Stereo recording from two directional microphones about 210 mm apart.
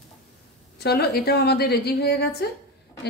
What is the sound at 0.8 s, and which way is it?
A woman's voice, 50° left (ahead or behind).